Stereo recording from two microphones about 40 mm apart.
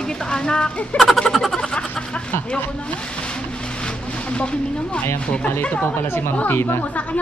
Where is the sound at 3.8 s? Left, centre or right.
Left.